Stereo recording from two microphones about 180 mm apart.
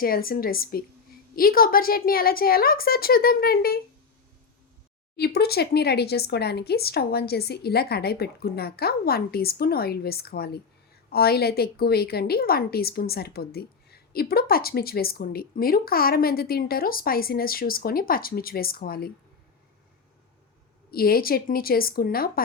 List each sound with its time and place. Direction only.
0.0 s a woman's voice: 55° left (ahead or behind)
5.1 s a woman's voice: 60° left (ahead or behind)
20.9 s a woman's voice: 55° left (ahead or behind)